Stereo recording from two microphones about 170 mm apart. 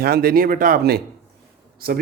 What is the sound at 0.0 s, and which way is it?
A man's voice, 65° right (ahead or behind).